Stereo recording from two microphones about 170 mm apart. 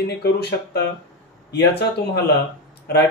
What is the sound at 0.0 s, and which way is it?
A man's voice, 70° left (ahead or behind).